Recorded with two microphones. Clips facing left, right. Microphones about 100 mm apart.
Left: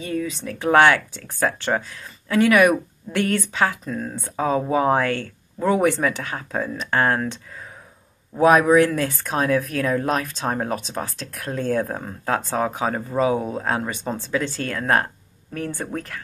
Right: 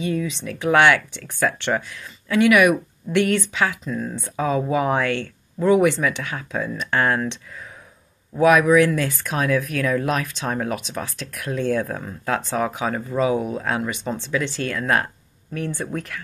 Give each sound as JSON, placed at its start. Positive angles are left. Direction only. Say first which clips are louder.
{"t": 0.0, "sound": "speech", "louder": "right 2 dB", "side_deg": 45}
{"t": 8.4, "sound": "speech", "louder": "even", "side_deg": 35}